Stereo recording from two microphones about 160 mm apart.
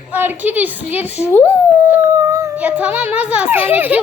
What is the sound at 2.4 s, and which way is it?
A child's voice, 10° right (ahead or behind).